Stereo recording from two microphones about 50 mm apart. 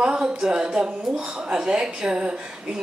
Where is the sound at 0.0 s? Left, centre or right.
Centre.